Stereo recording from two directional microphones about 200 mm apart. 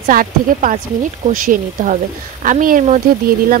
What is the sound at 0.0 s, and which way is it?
Speech, 40° right (ahead or behind).